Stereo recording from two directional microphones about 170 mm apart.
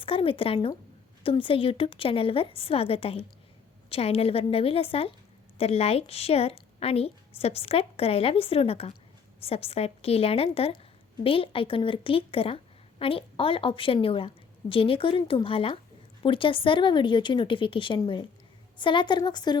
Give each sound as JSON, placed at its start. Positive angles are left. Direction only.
{"t": 0.0, "sound": "a woman's voice", "side_deg": 30}